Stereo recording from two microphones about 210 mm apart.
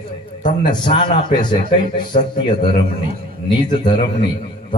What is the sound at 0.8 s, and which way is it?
A man's voice, 25° left (ahead or behind).